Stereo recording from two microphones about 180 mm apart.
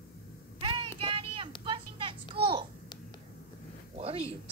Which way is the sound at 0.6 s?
30° right (ahead or behind).